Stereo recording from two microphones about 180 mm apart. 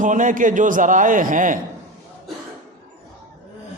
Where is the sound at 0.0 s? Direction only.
45° right (ahead or behind).